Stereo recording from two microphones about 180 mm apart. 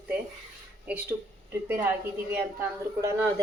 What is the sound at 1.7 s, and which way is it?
Speech, 10° right (ahead or behind).